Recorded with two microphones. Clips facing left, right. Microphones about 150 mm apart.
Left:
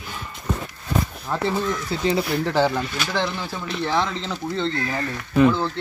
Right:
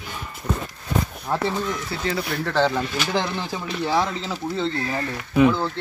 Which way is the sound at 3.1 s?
15° right (ahead or behind).